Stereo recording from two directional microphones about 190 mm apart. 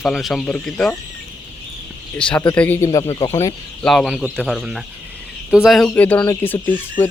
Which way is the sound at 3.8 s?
Centre (ahead or behind).